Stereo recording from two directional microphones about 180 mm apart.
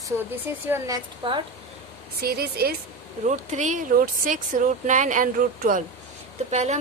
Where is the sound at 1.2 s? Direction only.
25° right (ahead or behind).